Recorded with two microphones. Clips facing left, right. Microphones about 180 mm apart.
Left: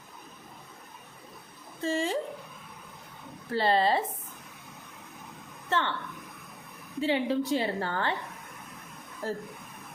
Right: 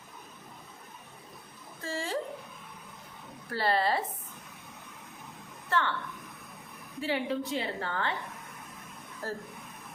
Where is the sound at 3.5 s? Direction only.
20° left (ahead or behind).